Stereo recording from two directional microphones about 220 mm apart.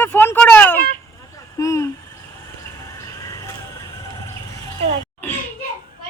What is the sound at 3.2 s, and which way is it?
Vehicle, 15° left (ahead or behind).